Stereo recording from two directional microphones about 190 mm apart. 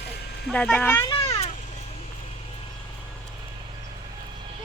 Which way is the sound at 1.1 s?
25° left (ahead or behind).